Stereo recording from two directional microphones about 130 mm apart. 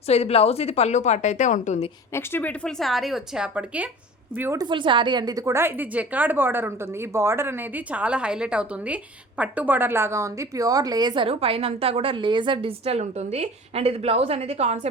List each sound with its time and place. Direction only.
0.1 s a woman's voice: 55° left (ahead or behind)
2.1 s speech: 15° left (ahead or behind); by 3.8 s 10° right (ahead or behind)
4.5 s a woman's voice: 35° right (ahead or behind); by 14.8 s 55° right (ahead or behind)